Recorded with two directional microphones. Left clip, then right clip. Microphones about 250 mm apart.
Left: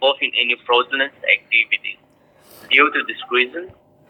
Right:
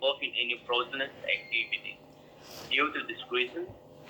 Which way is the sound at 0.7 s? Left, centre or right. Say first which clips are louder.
Left 14 dB; left.